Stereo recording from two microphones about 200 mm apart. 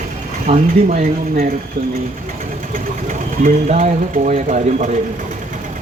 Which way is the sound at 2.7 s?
40° right (ahead or behind).